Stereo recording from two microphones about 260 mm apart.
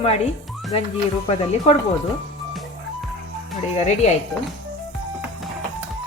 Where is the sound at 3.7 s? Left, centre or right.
Left.